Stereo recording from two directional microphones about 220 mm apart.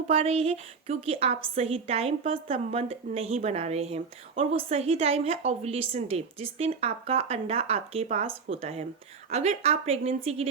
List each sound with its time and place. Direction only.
0.1 s a woman's voice: 30° right (ahead or behind)